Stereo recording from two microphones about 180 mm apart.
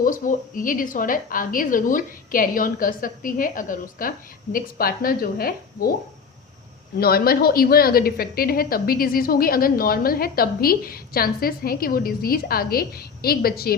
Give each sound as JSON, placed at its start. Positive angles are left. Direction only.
{"t": 0.0, "sound": "a woman's voice", "side_deg": 50}
{"t": 7.0, "sound": "a woman's voice", "side_deg": 55}